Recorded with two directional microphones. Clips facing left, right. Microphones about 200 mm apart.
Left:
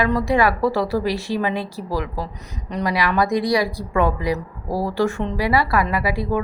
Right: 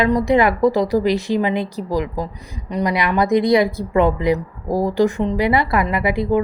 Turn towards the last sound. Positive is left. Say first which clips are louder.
# right 4 dB
turn(degrees=-20)  # may be behind; listen again after turning